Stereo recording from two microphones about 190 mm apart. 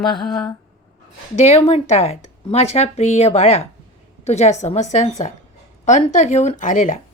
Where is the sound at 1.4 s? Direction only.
35° left (ahead or behind).